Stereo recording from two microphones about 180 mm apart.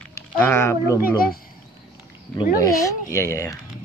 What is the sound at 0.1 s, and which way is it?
Speech, 15° left (ahead or behind).